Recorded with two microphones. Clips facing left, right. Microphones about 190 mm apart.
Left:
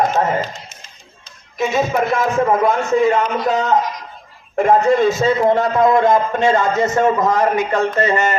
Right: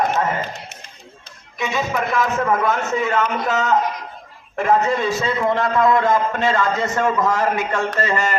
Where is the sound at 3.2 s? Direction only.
35° left (ahead or behind).